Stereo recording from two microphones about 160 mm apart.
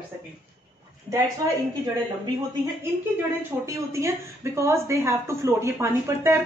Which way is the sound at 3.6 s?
20° right (ahead or behind).